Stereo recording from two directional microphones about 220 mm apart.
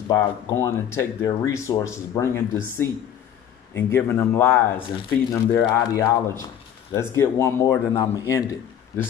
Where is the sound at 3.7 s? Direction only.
10° left (ahead or behind).